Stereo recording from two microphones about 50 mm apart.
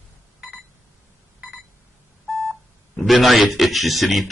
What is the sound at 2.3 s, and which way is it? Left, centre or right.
Telephone dialing, centre.